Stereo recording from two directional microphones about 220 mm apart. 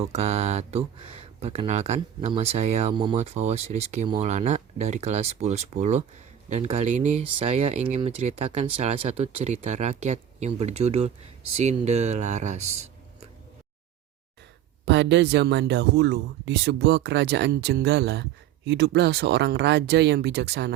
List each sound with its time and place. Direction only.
0.0 s speech: 30° right (ahead or behind)
14.8 s speech: 55° right (ahead or behind)